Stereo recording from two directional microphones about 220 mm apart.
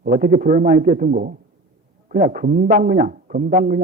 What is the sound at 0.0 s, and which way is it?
A man's voice, 40° right (ahead or behind).